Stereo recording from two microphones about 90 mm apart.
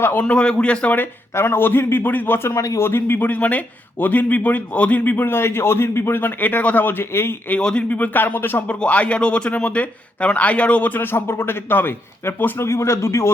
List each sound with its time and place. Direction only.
0.0 s speech: 20° left (ahead or behind)
7.6 s speech: 10° left (ahead or behind); by 13.3 s 30° left (ahead or behind)